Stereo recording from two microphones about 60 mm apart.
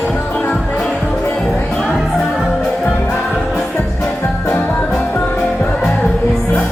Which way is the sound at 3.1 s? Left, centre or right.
Centre.